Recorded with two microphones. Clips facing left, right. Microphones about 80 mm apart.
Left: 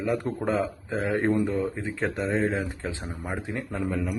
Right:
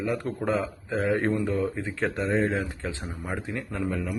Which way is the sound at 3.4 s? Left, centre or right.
Left.